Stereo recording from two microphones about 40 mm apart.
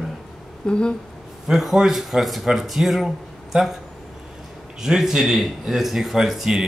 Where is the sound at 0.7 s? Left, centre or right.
Left.